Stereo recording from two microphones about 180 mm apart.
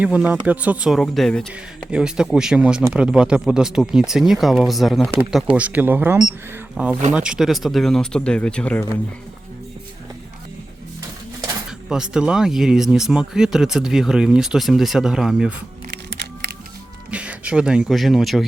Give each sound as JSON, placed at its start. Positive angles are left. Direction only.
{"t": 0.0, "sound": "speech", "side_deg": -5}
{"t": 11.9, "sound": "speech", "side_deg": -5}
{"t": 15.9, "sound": "music", "side_deg": -70}
{"t": 17.1, "sound": "speech", "side_deg": -5}